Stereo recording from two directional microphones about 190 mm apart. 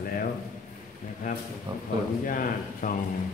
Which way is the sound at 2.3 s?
45° left (ahead or behind).